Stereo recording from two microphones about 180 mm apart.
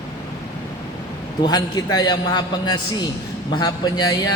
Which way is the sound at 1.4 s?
20° left (ahead or behind).